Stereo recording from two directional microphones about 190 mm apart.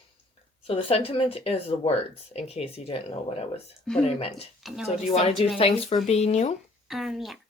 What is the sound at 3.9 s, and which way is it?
Speech, centre (ahead or behind).